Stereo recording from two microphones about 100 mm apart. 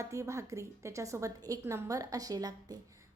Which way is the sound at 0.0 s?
30° right (ahead or behind).